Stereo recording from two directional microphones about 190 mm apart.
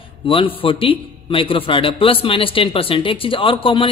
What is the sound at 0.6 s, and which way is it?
A man's voice, 30° left (ahead or behind).